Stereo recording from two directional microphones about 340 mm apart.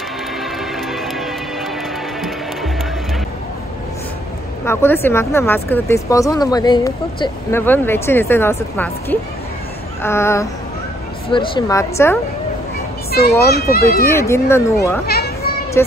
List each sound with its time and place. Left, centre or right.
4.6 s speech: centre
13.6 s a child's voice: left
14.0 s speech: centre
15.0 s children playing: left